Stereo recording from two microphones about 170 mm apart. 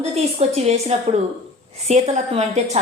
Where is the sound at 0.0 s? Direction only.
35° right (ahead or behind).